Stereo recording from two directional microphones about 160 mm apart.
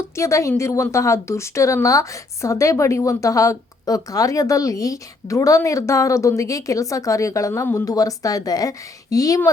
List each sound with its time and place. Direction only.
0.2 s a woman's voice: 20° left (ahead or behind)